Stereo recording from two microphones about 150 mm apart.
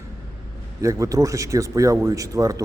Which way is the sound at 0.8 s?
20° right (ahead or behind).